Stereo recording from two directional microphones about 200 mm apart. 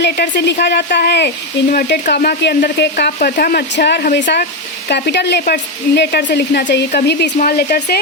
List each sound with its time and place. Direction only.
0.0 s speech: 60° left (ahead or behind)